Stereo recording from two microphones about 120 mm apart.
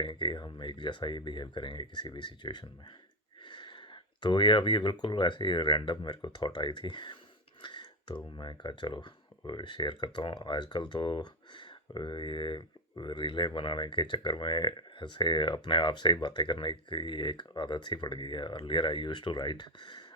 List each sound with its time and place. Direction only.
0.0 s speech: 40° left (ahead or behind)
7.6 s a sound: 40° left (ahead or behind)
8.4 s speech: 40° left (ahead or behind)